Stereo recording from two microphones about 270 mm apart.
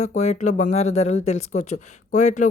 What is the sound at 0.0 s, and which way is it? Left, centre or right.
Speech, left.